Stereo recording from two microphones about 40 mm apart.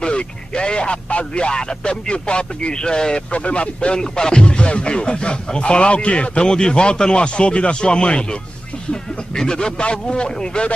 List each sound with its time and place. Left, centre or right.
0.0 s speech: left
3.3 s speech: left
9.3 s speech: centre